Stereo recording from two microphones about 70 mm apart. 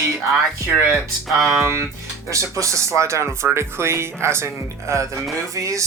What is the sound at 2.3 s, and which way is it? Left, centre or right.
Music, right.